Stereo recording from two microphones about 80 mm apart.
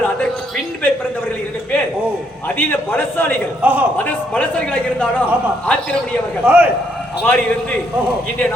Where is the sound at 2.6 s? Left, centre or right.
Left.